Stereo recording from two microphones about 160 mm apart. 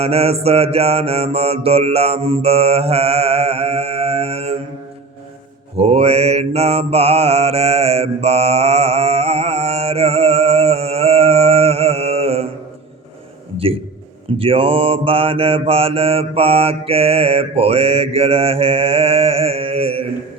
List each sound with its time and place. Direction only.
0.0 s mantra: 40° right (ahead or behind)
5.7 s mantra: 40° right (ahead or behind)
13.6 s a sound: 35° right (ahead or behind)
14.3 s mantra: 35° right (ahead or behind)